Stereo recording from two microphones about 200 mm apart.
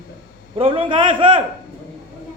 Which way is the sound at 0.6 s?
25° right (ahead or behind).